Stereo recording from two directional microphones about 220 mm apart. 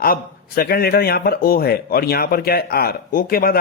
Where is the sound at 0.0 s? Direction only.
40° left (ahead or behind).